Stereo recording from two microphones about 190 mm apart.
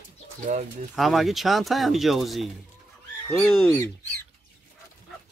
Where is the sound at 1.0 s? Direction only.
Centre (ahead or behind).